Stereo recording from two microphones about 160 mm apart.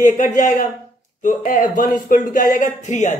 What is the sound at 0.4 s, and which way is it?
Speech, 50° left (ahead or behind).